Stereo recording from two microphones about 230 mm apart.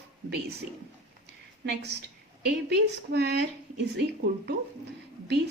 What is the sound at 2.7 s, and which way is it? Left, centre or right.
A woman's voice, right.